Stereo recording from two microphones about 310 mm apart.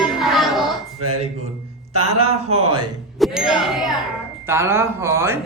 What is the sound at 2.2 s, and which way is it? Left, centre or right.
Speech, right.